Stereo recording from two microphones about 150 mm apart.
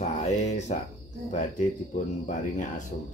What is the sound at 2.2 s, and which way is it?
Speech, 55° left (ahead or behind).